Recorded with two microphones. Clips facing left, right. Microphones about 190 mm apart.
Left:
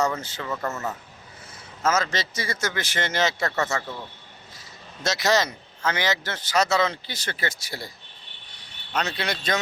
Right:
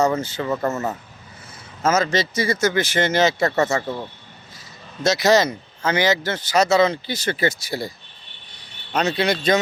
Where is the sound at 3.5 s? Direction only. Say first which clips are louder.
Right 7 dB; 25° right (ahead or behind).